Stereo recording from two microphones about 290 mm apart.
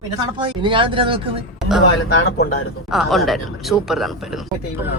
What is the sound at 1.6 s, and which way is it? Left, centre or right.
Speech, centre.